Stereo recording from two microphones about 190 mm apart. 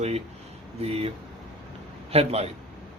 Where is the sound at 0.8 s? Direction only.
30° right (ahead or behind).